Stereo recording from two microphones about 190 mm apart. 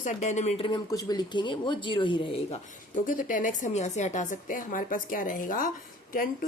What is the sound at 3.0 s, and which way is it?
Speech, 45° left (ahead or behind).